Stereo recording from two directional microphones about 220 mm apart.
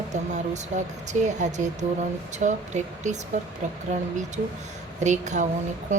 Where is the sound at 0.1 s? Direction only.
30° right (ahead or behind).